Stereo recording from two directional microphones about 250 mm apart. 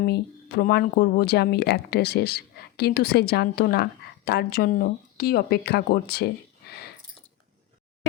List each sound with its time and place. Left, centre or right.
0.0 s speech: left